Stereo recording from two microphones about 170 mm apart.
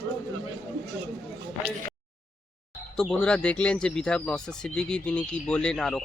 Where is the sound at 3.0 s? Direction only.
5° left (ahead or behind).